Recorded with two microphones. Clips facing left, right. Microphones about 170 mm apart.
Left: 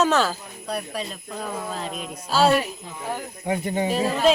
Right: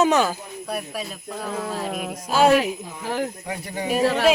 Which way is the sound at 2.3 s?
15° right (ahead or behind).